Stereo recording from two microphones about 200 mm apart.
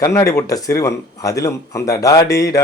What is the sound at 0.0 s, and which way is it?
Speech, 15° left (ahead or behind).